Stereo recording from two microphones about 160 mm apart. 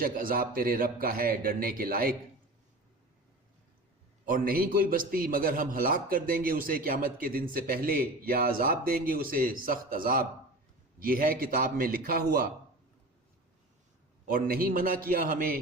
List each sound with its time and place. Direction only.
0.0 s a man's voice: 65° right (ahead or behind)
4.3 s a man's voice: 65° right (ahead or behind)
14.3 s a man's voice: 65° right (ahead or behind)